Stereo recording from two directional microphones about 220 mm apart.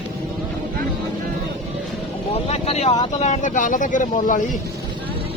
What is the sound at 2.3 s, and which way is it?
Speech, 30° left (ahead or behind).